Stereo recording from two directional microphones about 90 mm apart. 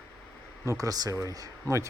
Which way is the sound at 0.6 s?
40° right (ahead or behind).